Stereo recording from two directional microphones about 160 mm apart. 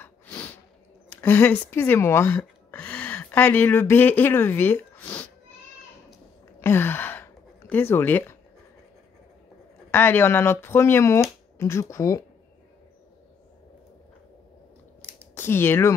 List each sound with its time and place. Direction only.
0.0 s snort: 10° left (ahead or behind)
1.1 s speech: 10° left (ahead or behind)
6.6 s gasp: 15° left (ahead or behind)
7.6 s speech: 10° left (ahead or behind)
9.8 s speech: 15° left (ahead or behind)
15.3 s speech: 15° left (ahead or behind)